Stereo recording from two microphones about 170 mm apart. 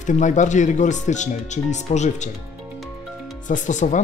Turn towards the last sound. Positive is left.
turn(degrees=45)  # may be behind; listen again after turning